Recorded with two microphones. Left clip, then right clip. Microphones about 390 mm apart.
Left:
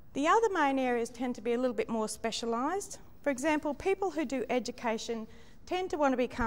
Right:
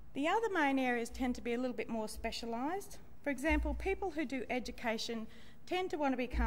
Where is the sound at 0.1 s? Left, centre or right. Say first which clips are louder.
Left 7 dB; left.